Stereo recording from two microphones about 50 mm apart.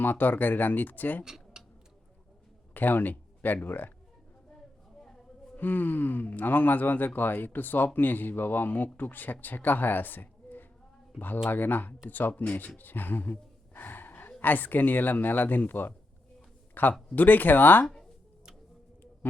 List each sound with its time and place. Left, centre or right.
0.0 s speech: left
1.2 s tick-tock: centre
2.7 s speech: left
5.0 s a sound: centre
5.5 s speech: left
12.4 s gasp: left
14.4 s speech: left
17.8 s a sound: centre
19.2 s a sound: left